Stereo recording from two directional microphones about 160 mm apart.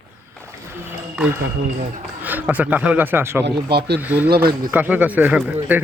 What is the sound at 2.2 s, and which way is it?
Speech, 10° right (ahead or behind).